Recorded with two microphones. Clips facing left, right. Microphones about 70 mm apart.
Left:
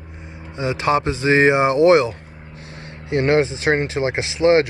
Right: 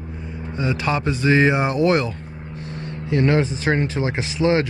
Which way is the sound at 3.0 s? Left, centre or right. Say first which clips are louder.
Left 2 dB; left.